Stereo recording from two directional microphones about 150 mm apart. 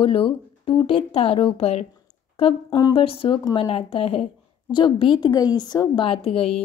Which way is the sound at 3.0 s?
35° left (ahead or behind).